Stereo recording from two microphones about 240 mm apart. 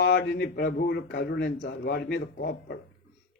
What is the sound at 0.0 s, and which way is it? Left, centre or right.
Speech, left.